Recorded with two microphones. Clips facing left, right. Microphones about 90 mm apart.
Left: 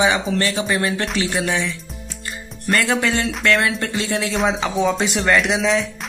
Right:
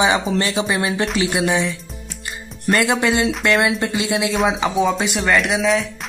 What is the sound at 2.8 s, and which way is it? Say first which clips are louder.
Speech: right 2 dB; 15° right (ahead or behind).